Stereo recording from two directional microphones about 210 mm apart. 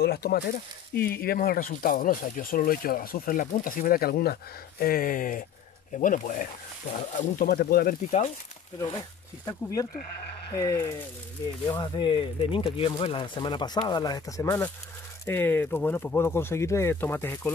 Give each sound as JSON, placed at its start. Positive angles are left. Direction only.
{"t": 0.0, "sound": "speech", "side_deg": 50}
{"t": 10.5, "sound": "speech", "side_deg": 15}